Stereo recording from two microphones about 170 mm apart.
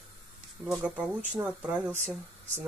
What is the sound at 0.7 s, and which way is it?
Speech, 5° right (ahead or behind).